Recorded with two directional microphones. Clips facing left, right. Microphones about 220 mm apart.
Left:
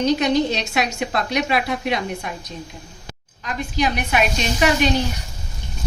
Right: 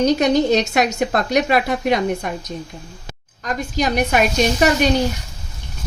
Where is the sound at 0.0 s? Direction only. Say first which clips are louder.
Right 3 dB; 45° right (ahead or behind).